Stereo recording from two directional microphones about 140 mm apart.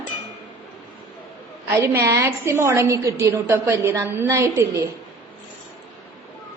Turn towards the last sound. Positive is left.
turn(degrees=-20)  # may be behind; listen again after turning